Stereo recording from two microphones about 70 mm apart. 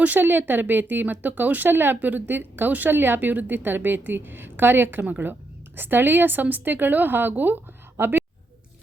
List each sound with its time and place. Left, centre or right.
0.0 s speech: right